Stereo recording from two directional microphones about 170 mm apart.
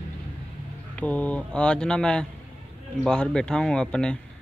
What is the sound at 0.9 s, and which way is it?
Speech, 10° left (ahead or behind).